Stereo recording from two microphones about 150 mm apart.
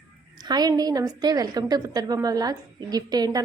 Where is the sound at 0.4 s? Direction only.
25° right (ahead or behind).